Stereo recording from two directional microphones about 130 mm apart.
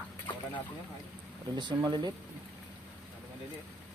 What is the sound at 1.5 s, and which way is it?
Speech, 35° right (ahead or behind).